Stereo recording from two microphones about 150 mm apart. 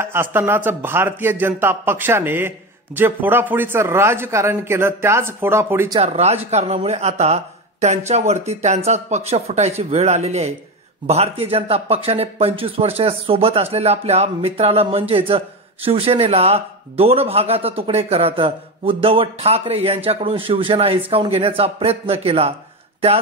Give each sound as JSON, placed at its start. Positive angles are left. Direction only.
{"t": 0.0, "sound": "a man's voice", "side_deg": -15}
{"t": 5.9, "sound": "speech", "side_deg": -45}